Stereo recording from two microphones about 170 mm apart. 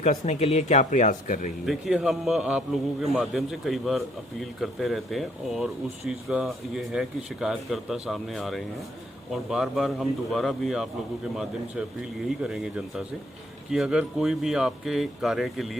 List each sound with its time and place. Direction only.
0.0 s speech: 40° left (ahead or behind)
1.6 s a man's voice: centre (ahead or behind)
12.4 s a man's voice: 5° right (ahead or behind)